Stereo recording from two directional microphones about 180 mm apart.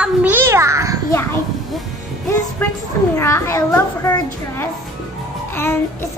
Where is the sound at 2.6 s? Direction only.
10° left (ahead or behind).